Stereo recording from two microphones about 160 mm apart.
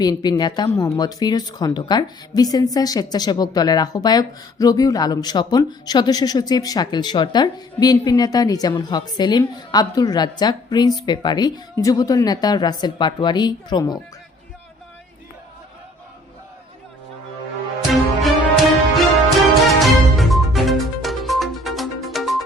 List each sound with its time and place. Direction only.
0.0 s a woman's voice: 25° left (ahead or behind)
17.8 s music: centre (ahead or behind)